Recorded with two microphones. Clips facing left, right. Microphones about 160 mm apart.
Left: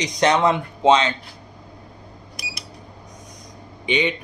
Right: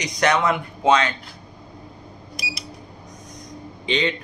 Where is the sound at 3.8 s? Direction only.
15° left (ahead or behind).